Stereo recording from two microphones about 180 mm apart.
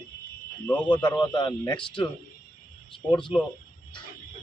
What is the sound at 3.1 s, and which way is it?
Speech, 25° left (ahead or behind).